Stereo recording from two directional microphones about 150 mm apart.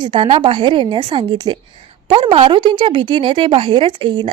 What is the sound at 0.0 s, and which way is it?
A woman's voice, 35° right (ahead or behind).